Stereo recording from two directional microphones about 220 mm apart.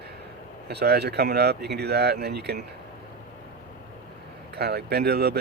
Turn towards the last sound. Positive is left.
turn(degrees=-45)  # may be behind; listen again after turning